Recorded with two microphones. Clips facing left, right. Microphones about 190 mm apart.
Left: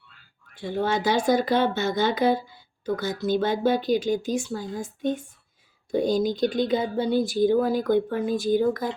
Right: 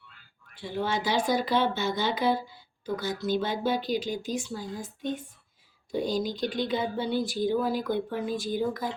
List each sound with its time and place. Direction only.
0.5 s speech: 50° left (ahead or behind)